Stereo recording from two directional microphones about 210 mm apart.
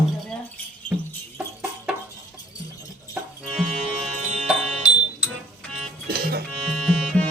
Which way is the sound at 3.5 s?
Centre (ahead or behind).